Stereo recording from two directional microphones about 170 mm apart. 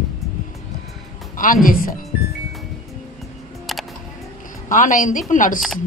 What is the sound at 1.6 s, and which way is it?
Speech, 55° left (ahead or behind).